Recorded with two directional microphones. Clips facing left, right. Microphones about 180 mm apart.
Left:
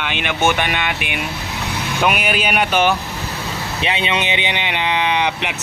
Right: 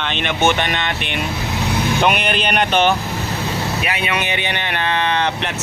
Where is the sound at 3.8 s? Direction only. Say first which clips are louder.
Left 1 dB; 25° left (ahead or behind).